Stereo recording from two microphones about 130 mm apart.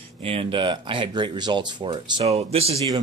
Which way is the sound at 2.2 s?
50° right (ahead or behind).